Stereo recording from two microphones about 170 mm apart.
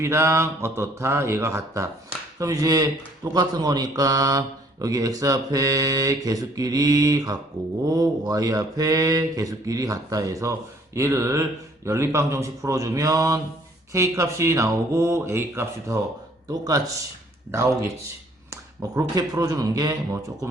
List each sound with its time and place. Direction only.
0.0 s speech: 15° right (ahead or behind)